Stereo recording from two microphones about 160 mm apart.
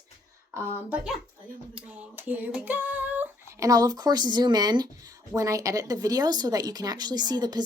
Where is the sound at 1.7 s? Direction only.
10° right (ahead or behind).